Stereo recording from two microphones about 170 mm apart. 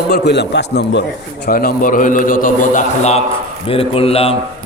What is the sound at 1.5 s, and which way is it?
A man's voice, 60° left (ahead or behind).